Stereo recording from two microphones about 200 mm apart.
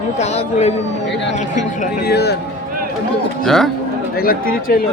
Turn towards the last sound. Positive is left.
turn(degrees=45)  # may be behind; listen again after turning